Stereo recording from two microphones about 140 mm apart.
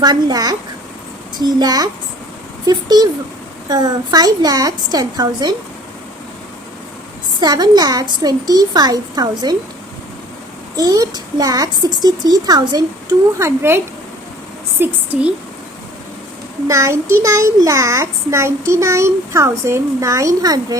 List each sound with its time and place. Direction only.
0.0 s a child's voice: 30° right (ahead or behind)
7.3 s a child's voice: 30° right (ahead or behind)
10.8 s a child's voice: 25° right (ahead or behind); by 15.3 s 10° right (ahead or behind)
16.6 s a child's voice: 20° right (ahead or behind)